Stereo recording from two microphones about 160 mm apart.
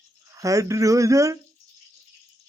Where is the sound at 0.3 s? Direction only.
20° right (ahead or behind).